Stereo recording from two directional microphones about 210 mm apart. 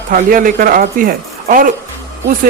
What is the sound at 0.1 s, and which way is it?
Speech, 40° right (ahead or behind).